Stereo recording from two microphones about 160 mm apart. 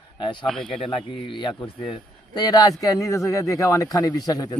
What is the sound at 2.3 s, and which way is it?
Speech, 25° left (ahead or behind).